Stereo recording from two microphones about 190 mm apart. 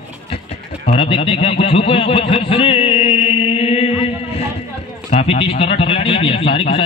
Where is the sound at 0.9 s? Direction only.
30° left (ahead or behind).